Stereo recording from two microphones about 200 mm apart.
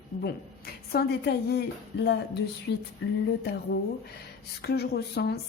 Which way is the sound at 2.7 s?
60° left (ahead or behind).